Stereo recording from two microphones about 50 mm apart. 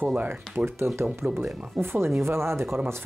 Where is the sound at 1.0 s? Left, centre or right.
Right.